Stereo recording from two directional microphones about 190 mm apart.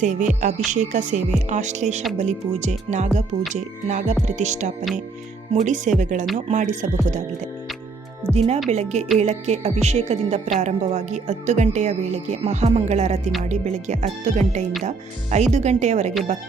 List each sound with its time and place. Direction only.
0.0 s a woman's voice: 40° right (ahead or behind)
8.3 s a woman's voice: 30° right (ahead or behind)